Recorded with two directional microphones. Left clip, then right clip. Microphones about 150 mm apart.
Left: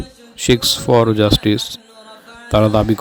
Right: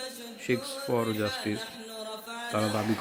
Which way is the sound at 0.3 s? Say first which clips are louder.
Left 17 dB; 55° left (ahead or behind).